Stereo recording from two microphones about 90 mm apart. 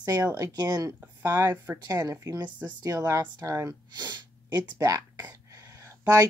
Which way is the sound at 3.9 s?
50° right (ahead or behind).